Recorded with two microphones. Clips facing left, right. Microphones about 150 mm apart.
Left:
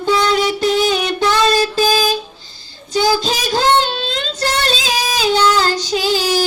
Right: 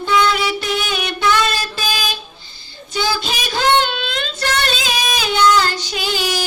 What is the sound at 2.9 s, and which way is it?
Child singing, 40° left (ahead or behind).